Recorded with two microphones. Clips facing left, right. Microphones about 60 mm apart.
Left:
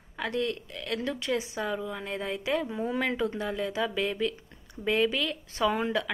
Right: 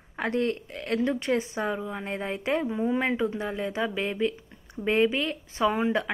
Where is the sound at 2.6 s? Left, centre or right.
Centre.